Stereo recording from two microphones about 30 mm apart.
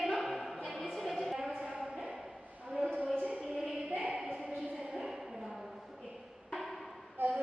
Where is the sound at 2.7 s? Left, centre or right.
Right.